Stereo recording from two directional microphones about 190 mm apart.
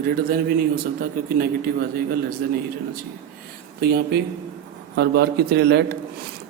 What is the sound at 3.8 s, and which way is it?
A man's voice, 55° right (ahead or behind).